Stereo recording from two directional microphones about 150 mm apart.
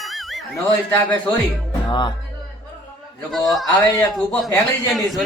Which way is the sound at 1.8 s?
30° left (ahead or behind).